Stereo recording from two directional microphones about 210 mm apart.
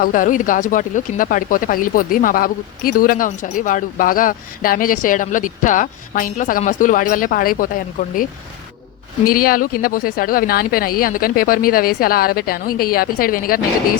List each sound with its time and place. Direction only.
0.0 s speech: 40° left (ahead or behind)
9.2 s a woman's voice: 45° left (ahead or behind)